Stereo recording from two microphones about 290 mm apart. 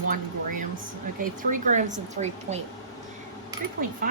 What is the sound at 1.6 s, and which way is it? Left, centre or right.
Speech, right.